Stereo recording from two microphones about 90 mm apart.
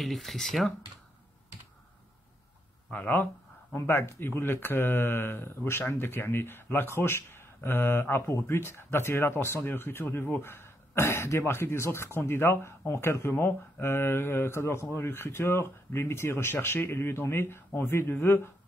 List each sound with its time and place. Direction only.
0.0 s speech: centre (ahead or behind)
2.9 s speech: 20° left (ahead or behind)